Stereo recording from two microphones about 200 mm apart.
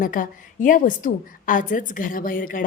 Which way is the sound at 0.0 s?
45° left (ahead or behind).